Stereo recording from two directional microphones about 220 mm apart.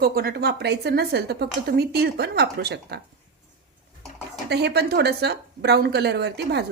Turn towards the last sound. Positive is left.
turn(degrees=-50)  # may be behind; listen again after turning